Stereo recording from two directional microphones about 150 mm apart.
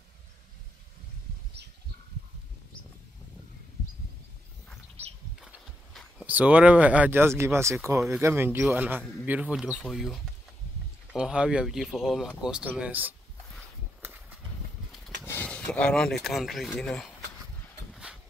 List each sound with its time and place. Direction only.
5.0 s a sound: 45° right (ahead or behind)
5.9 s speech: 10° right (ahead or behind)
15.2 s speech: 10° left (ahead or behind)